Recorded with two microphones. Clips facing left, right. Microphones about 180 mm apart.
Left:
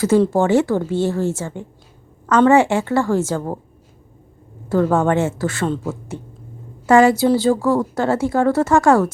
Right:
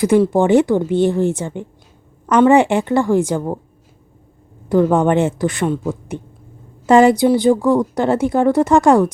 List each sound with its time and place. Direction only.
0.0 s a woman's voice: 15° right (ahead or behind)
4.7 s a woman's voice: 15° right (ahead or behind)